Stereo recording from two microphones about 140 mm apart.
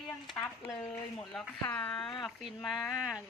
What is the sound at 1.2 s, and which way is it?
Speech, centre (ahead or behind).